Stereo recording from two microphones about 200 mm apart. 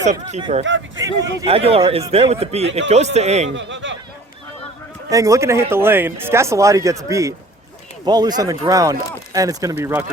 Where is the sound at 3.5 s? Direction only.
65° right (ahead or behind).